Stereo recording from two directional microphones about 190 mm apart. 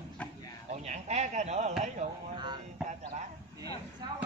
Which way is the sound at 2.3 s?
25° right (ahead or behind).